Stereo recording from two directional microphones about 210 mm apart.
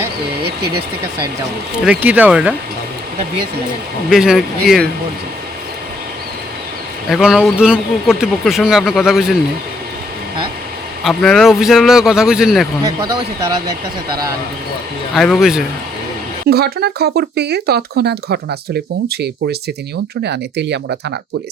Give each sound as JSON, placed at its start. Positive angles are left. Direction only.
{"t": 1.8, "sound": "speech", "side_deg": -5}
{"t": 4.1, "sound": "speech", "side_deg": 0}
{"t": 7.1, "sound": "speech", "side_deg": -5}
{"t": 11.0, "sound": "speech", "side_deg": 5}
{"t": 13.0, "sound": "speech", "side_deg": -15}
{"t": 15.1, "sound": "speech", "side_deg": 0}
{"t": 16.5, "sound": "speech", "side_deg": -50}